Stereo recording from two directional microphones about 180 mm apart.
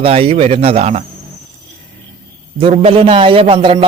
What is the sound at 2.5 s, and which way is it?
A man's voice, 30° right (ahead or behind).